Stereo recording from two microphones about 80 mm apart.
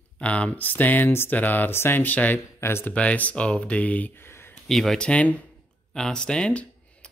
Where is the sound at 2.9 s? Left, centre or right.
Centre.